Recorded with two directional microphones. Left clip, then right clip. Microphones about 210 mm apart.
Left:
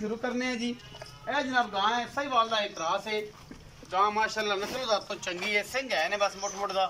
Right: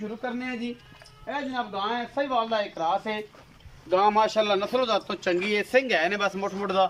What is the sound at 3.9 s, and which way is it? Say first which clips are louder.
Speech: right 5 dB; 50° right (ahead or behind).